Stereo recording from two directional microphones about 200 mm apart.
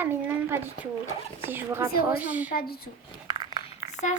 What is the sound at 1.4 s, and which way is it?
Speech, 10° right (ahead or behind).